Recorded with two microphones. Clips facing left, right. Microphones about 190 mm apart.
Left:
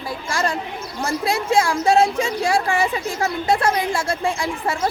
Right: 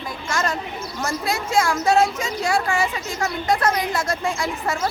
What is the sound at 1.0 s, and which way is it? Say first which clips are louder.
Speech: left 3 dB; 30° left (ahead or behind).